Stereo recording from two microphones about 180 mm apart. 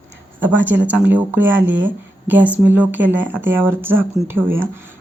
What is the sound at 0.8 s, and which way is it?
Speech, 10° right (ahead or behind).